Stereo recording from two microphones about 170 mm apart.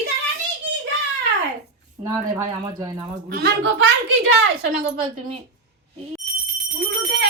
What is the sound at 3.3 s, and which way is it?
Speech, 85° right.